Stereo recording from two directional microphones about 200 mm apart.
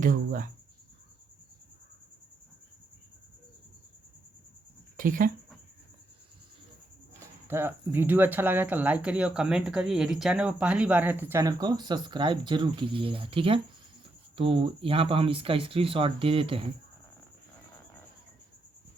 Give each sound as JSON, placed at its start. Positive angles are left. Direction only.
{"t": 0.0, "sound": "speech", "side_deg": -40}
{"t": 4.9, "sound": "speech", "side_deg": -45}
{"t": 7.2, "sound": "speech", "side_deg": -10}